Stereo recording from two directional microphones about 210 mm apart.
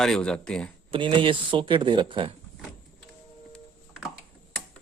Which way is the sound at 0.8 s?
25° right (ahead or behind).